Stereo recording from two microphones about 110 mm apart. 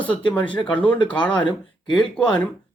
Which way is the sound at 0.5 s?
45° left (ahead or behind).